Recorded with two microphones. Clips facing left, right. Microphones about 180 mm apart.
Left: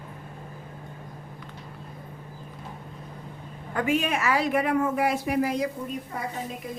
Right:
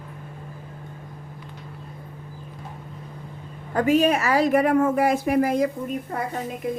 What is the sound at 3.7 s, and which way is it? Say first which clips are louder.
A woman's voice: right 6 dB; 40° right (ahead or behind).